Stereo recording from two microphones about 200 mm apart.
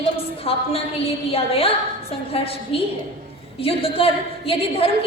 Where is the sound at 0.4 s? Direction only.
30° left (ahead or behind).